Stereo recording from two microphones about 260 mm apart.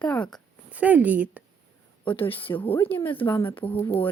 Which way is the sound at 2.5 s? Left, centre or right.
Centre.